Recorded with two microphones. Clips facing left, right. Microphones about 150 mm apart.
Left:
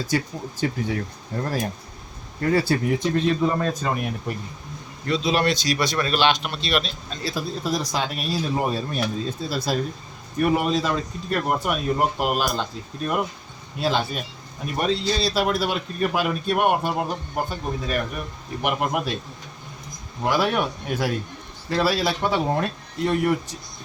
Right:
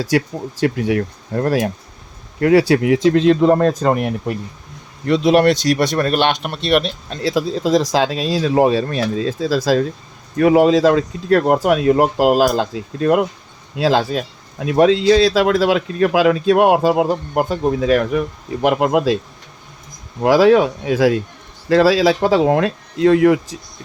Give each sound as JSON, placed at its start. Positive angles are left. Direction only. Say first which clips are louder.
{"t": 0.0, "sound": "speech", "louder": "right 7 dB", "side_deg": -80}
{"t": 20.2, "sound": "speech", "louder": "right 11 dB", "side_deg": -90}